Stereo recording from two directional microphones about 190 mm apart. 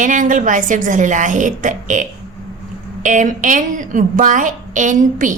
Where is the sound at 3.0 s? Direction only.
40° right (ahead or behind).